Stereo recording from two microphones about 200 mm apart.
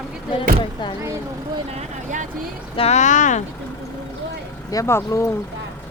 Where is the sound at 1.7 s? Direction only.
40° right (ahead or behind).